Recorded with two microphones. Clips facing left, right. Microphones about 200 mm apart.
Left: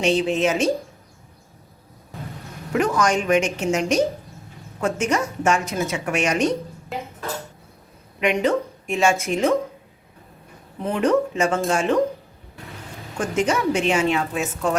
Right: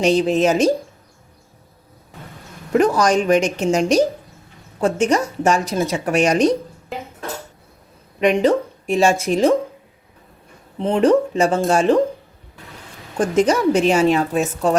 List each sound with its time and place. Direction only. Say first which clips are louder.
0.0 s a woman's voice: right 4 dB; 40° right (ahead or behind)
2.7 s a woman's voice: right 5 dB; 35° right (ahead or behind)
8.2 s a woman's voice: right 5 dB; 35° right (ahead or behind)
10.8 s a woman's voice: right 5 dB; 30° right (ahead or behind)
13.1 s a woman's voice: right 5 dB; 35° right (ahead or behind)